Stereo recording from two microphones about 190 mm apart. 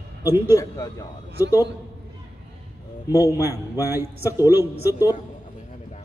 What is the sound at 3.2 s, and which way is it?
Speech, 15° right (ahead or behind).